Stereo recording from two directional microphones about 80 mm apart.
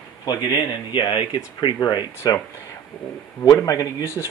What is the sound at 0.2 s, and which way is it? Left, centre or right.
Speech, left.